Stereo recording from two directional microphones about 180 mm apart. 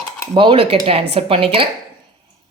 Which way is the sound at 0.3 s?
30° right (ahead or behind).